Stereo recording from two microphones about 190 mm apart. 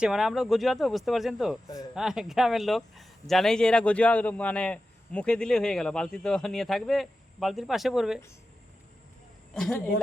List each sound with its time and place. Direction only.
0.0 s speech: centre (ahead or behind)
1.6 s speech: 20° left (ahead or behind)
2.0 s speech: centre (ahead or behind)
9.6 s speech: centre (ahead or behind)